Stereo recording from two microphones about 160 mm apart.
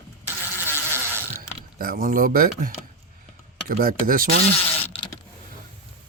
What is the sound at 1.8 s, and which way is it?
Speech, 65° right (ahead or behind).